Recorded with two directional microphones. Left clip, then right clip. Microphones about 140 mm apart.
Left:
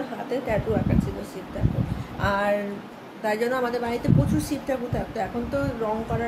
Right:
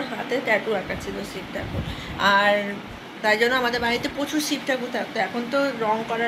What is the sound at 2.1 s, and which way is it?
A woman's voice, 5° left (ahead or behind).